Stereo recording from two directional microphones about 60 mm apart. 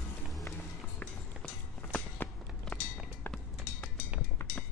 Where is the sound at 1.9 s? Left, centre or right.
Left.